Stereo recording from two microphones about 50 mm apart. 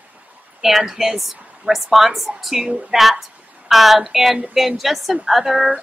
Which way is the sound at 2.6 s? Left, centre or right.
Right.